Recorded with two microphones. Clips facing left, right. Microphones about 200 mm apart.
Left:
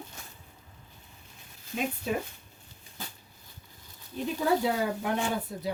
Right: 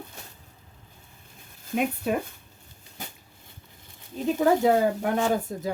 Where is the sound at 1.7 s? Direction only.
60° right (ahead or behind).